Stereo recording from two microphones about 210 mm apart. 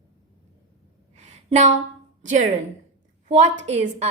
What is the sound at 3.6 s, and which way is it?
Speech, 30° right (ahead or behind).